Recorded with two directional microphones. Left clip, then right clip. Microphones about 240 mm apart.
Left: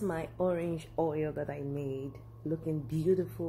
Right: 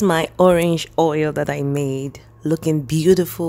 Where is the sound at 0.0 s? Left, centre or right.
Right.